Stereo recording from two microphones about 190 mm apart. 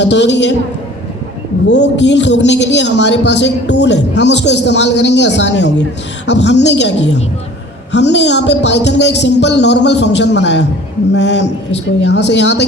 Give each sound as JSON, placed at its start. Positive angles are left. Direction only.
{"t": 0.0, "sound": "a woman's voice", "side_deg": 65}
{"t": 1.6, "sound": "a man's voice", "side_deg": 65}
{"t": 7.9, "sound": "a man's voice", "side_deg": 65}